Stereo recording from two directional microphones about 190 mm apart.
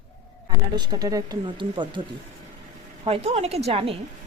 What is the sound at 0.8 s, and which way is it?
Speech, 20° right (ahead or behind).